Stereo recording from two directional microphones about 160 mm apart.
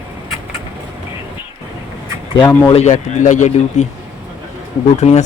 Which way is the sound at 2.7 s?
45° left (ahead or behind).